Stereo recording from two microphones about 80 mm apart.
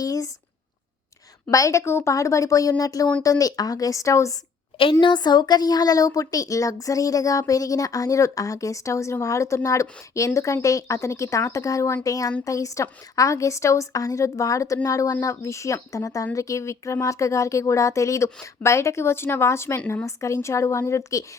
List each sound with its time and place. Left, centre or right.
0.0 s speech: left
1.5 s speech: left
4.8 s speech: left